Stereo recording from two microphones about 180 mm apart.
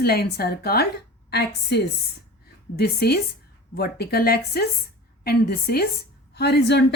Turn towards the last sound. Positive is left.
turn(degrees=70)  # may be behind; listen again after turning